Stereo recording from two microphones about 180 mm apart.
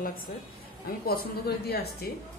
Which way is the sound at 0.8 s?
55° left (ahead or behind).